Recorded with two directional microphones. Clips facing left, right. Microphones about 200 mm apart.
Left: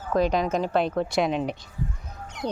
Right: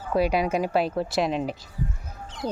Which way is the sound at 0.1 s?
10° right (ahead or behind).